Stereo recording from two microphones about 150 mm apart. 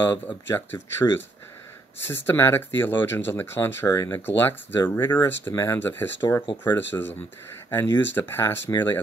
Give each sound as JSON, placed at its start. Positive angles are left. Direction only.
{"t": 0.5, "sound": "speech", "side_deg": 15}
{"t": 6.2, "sound": "speech", "side_deg": 30}
{"t": 6.6, "sound": "speech", "side_deg": 15}